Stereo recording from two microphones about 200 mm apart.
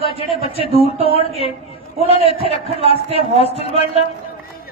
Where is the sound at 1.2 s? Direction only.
30° left (ahead or behind).